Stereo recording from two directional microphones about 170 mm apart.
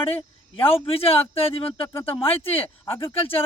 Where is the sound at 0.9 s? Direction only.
35° left (ahead or behind).